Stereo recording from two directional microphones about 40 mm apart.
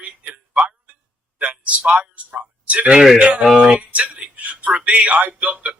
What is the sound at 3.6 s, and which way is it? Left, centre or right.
Speech, right.